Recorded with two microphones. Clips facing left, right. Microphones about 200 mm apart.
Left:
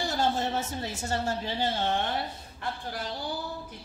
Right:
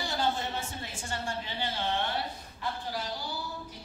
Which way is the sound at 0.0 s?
40° left (ahead or behind).